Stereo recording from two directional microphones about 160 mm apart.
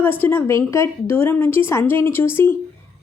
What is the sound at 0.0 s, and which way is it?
A woman's voice, 10° left (ahead or behind).